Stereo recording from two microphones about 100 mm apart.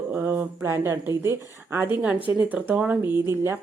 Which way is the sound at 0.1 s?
20° right (ahead or behind).